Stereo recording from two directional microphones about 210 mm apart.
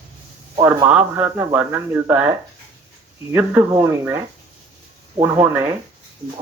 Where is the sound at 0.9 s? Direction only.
5° right (ahead or behind).